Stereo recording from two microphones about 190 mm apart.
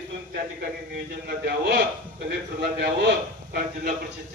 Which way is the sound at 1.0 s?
60° right (ahead or behind).